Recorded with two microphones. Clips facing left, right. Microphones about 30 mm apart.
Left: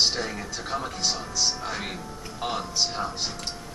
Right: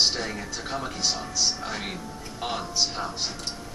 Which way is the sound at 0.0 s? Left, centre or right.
Centre.